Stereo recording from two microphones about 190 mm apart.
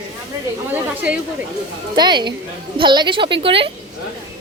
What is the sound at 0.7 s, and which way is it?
Speech, 5° right (ahead or behind).